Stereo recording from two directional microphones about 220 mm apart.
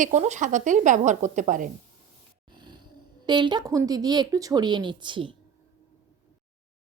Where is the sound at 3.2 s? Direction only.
20° right (ahead or behind).